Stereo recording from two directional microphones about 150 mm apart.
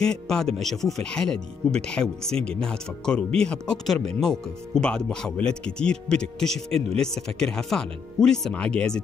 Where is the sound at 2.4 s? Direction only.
5° left (ahead or behind).